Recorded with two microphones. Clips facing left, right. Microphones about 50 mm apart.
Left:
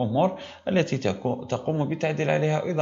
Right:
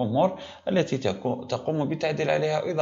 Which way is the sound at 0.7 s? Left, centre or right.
Left.